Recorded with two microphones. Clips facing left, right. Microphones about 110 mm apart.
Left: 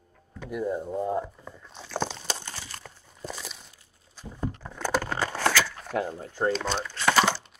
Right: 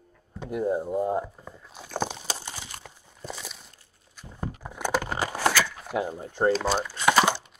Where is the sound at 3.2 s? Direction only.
Centre (ahead or behind).